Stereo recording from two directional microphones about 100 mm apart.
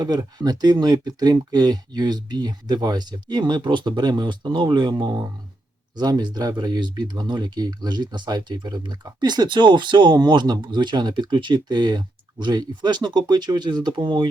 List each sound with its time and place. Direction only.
0.0 s speech: 40° right (ahead or behind)